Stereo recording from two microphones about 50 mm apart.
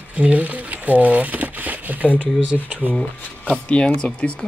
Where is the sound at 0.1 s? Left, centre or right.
Right.